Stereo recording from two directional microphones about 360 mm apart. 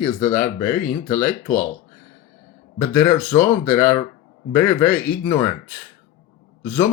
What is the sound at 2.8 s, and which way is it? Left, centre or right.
Speech, centre.